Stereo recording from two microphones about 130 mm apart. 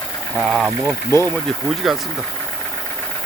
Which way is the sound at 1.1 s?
20° left (ahead or behind).